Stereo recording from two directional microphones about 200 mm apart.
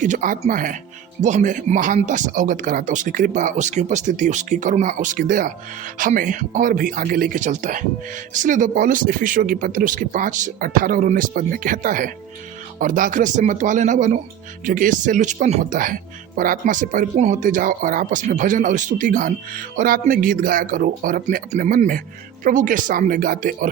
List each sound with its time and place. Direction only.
0.0 s speech: 40° right (ahead or behind)